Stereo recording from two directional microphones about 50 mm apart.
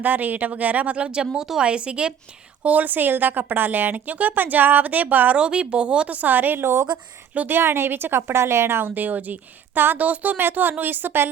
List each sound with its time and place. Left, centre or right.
0.0 s a woman's voice: right
2.6 s speech: right
5.4 s a woman's voice: right
6.1 s a woman's voice: right
9.0 s speech: right
10.3 s a woman's voice: right